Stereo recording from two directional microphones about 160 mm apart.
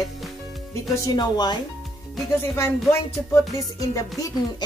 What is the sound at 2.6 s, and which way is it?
Music, 15° left (ahead or behind).